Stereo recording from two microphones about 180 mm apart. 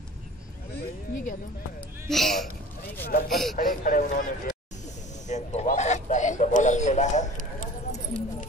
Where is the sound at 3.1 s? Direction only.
55° left (ahead or behind).